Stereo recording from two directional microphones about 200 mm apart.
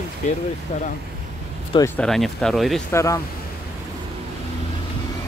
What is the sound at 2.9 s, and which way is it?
Speech, 15° left (ahead or behind).